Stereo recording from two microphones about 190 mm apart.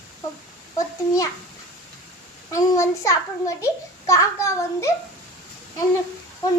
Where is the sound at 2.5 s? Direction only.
15° left (ahead or behind).